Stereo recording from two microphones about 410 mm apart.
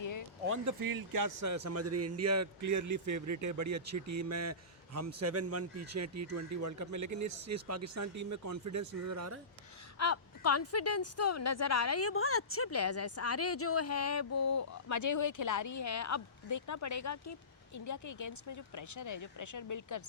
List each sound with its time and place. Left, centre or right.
0.0 s a sound: left
0.6 s a man's voice: right
10.0 s a woman's voice: left